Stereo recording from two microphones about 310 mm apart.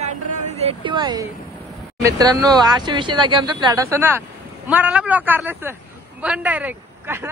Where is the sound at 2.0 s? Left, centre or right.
Centre.